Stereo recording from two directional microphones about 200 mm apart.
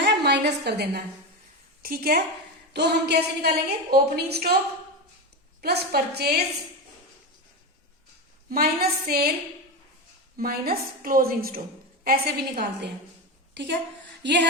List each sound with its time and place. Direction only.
0.0 s a sound: 55° right (ahead or behind)
1.8 s a woman's voice: 50° right (ahead or behind)
5.6 s a woman's voice: 55° right (ahead or behind)
8.4 s a woman's voice: 50° right (ahead or behind)
10.3 s a woman's voice: 50° right (ahead or behind)
14.2 s a sound: 60° right (ahead or behind)